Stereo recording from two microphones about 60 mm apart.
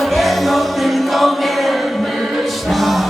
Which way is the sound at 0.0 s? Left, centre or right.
Centre.